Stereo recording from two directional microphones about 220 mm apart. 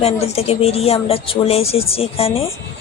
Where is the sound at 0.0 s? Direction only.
25° left (ahead or behind).